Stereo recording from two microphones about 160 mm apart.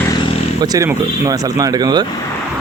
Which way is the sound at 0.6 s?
20° right (ahead or behind).